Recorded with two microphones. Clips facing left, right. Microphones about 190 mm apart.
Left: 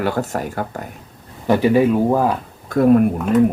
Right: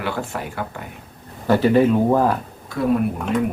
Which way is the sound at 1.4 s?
15° left (ahead or behind).